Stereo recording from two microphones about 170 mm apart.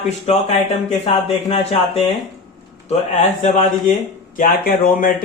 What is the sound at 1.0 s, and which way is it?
Speech, 35° left (ahead or behind).